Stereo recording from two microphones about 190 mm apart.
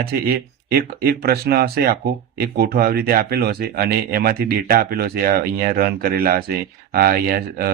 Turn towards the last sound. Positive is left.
turn(degrees=-55)  # may be behind; listen again after turning